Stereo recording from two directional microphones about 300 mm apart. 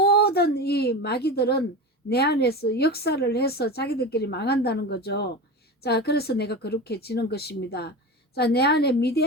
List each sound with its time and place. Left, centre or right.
0.0 s a woman's voice: left